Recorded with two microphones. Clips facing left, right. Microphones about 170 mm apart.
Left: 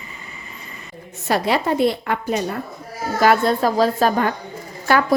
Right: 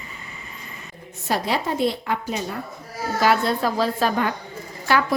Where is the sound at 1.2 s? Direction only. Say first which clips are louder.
Left 4 dB; 65° left (ahead or behind).